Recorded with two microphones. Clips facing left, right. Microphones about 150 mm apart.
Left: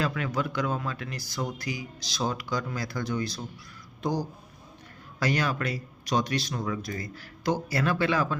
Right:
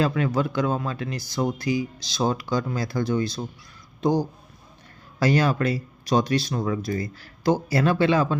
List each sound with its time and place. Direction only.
0.0 s speech: 30° right (ahead or behind)